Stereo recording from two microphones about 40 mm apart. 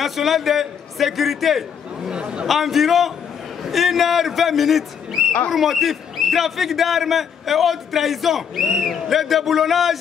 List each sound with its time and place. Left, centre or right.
0.0 s a man's voice: centre
2.0 s chatter: right
2.4 s a man's voice: centre